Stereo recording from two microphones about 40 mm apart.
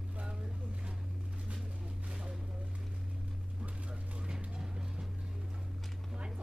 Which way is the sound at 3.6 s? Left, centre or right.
Right.